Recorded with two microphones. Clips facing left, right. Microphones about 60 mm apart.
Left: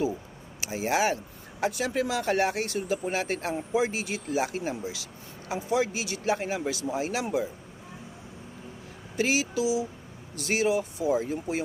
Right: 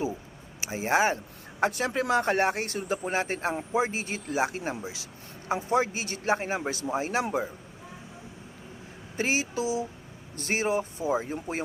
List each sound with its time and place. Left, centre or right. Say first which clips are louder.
0.6 s speech: right 1 dB; right
1.6 s speech: right 1 dB; right
5.5 s speech: even; right
9.1 s speech: left 2 dB; right